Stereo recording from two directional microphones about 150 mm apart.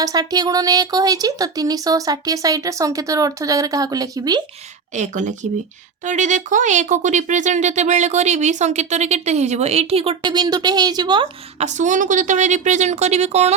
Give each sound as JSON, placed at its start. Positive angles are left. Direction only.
{"t": 0.0, "sound": "speech", "side_deg": -25}
{"t": 4.9, "sound": "speech", "side_deg": -55}
{"t": 11.6, "sound": "speech", "side_deg": -55}